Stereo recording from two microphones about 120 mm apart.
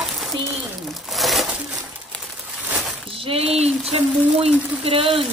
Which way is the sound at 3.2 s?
55° right (ahead or behind).